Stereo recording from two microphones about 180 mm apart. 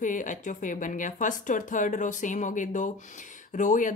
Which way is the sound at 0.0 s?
45° left (ahead or behind).